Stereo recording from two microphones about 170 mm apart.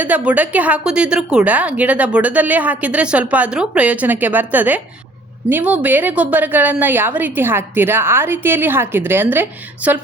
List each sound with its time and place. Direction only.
0.0 s a woman's voice: 10° right (ahead or behind)